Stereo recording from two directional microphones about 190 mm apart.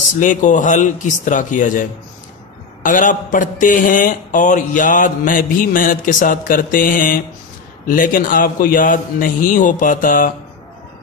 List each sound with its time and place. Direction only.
0.2 s speech: 40° left (ahead or behind)